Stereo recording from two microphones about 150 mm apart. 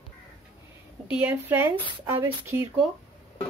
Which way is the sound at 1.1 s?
15° right (ahead or behind).